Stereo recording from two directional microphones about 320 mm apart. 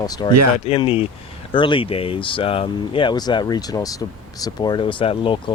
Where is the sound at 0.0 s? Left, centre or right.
Centre.